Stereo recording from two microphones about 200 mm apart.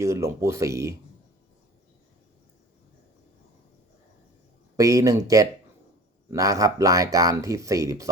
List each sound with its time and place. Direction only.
0.0 s speech: 15° right (ahead or behind)
4.8 s speech: 15° right (ahead or behind)